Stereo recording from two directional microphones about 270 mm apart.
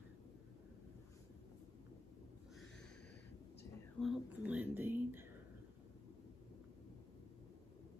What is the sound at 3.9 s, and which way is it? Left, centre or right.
Speech, centre.